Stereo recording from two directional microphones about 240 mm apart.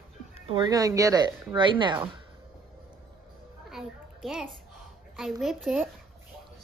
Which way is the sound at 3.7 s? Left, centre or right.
Centre.